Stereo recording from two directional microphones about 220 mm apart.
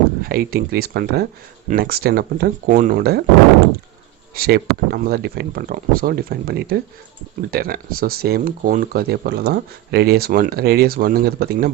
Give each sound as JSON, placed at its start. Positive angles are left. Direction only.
{"t": 0.2, "sound": "speech", "side_deg": -45}
{"t": 4.4, "sound": "speech", "side_deg": -45}